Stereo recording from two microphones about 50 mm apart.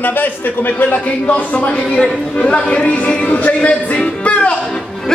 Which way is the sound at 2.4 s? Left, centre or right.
Left.